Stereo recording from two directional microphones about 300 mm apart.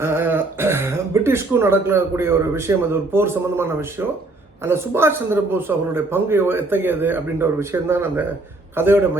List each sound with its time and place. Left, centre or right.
0.0 s a man's voice: centre